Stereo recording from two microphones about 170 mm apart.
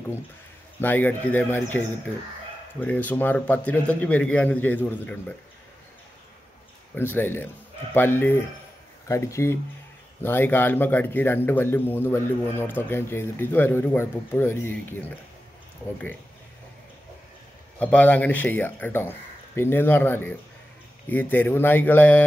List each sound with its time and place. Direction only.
0.7 s a man's voice: 10° left (ahead or behind)
7.0 s a man's voice: 10° left (ahead or behind)
17.7 s a man's voice: 10° left (ahead or behind)